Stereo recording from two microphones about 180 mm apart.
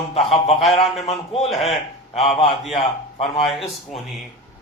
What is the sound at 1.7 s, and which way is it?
A man's voice, 35° left (ahead or behind).